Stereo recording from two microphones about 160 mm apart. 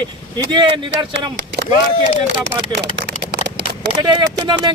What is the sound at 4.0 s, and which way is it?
Speech, 25° right (ahead or behind).